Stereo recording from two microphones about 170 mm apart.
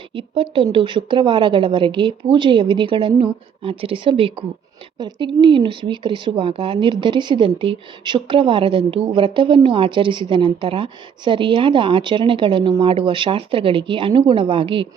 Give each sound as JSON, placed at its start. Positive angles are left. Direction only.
{"t": 0.1, "sound": "speech", "side_deg": -30}